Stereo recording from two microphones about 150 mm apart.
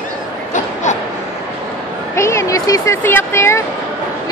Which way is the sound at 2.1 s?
20° left (ahead or behind).